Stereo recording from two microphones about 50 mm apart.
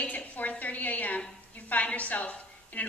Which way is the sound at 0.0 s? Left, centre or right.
Left.